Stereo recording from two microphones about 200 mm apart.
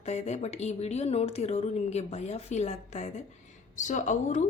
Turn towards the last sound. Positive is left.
turn(degrees=40)  # may be behind; listen again after turning